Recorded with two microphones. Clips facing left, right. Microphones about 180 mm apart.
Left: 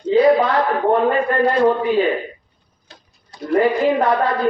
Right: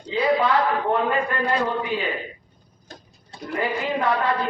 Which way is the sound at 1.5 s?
50° left (ahead or behind).